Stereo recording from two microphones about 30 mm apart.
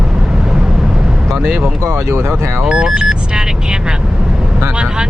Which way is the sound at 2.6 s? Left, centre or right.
Right.